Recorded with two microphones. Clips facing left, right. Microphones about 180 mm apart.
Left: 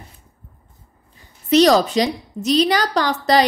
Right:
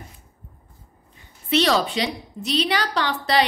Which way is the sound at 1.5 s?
40° left (ahead or behind).